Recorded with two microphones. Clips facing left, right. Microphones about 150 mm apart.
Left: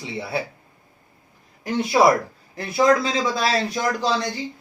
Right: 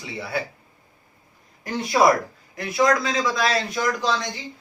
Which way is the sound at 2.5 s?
30° left (ahead or behind).